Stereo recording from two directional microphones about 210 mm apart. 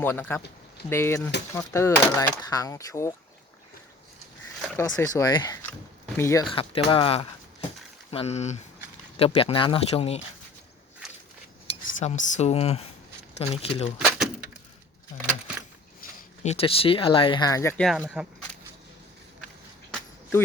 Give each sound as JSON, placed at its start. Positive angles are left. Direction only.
{"t": 0.0, "sound": "speech", "side_deg": 10}
{"t": 4.8, "sound": "speech", "side_deg": 15}
{"t": 6.5, "sound": "speech", "side_deg": 25}
{"t": 11.9, "sound": "speech", "side_deg": 35}
{"t": 14.0, "sound": "a sound", "side_deg": -5}
{"t": 16.0, "sound": "speech", "side_deg": 35}
{"t": 18.2, "sound": "speech", "side_deg": -5}